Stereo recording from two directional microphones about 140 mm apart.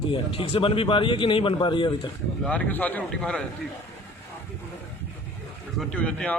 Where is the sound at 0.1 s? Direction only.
40° left (ahead or behind).